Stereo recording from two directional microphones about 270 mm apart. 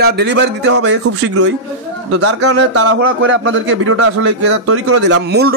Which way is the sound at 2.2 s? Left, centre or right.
Right.